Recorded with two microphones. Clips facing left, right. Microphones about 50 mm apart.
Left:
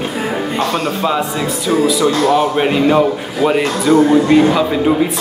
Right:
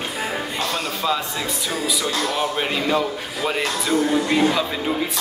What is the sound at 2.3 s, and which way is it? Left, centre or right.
Speech, centre.